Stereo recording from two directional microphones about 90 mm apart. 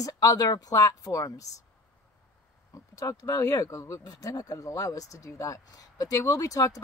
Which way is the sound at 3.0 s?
40° left (ahead or behind).